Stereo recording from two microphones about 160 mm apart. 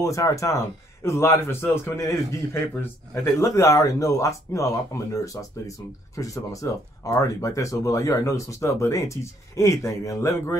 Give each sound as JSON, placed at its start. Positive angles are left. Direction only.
{"t": 0.0, "sound": "speech", "side_deg": 20}